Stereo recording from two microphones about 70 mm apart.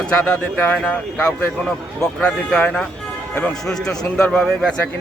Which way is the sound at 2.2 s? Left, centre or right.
Centre.